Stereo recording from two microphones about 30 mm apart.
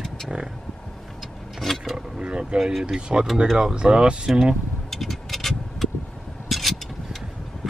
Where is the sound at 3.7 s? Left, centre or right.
Right.